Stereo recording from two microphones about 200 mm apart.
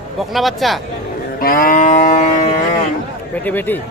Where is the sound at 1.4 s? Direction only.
45° left (ahead or behind).